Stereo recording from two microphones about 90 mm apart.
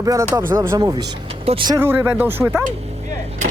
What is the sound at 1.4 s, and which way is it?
Speech, 90° right.